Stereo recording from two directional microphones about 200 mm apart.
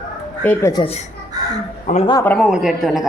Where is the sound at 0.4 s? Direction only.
15° left (ahead or behind).